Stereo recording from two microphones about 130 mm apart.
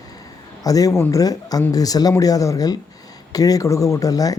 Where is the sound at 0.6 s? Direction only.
30° left (ahead or behind).